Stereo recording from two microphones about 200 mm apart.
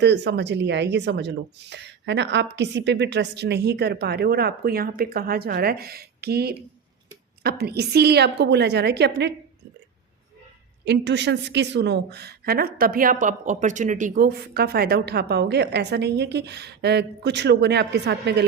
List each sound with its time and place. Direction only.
0.0 s a woman's voice: 60° right (ahead or behind)
10.8 s a woman's voice: 60° right (ahead or behind)